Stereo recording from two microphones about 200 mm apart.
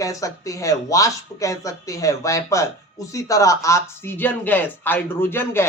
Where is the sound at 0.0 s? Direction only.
15° left (ahead or behind).